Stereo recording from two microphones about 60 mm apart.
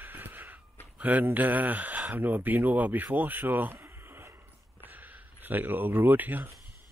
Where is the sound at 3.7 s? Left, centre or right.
Right.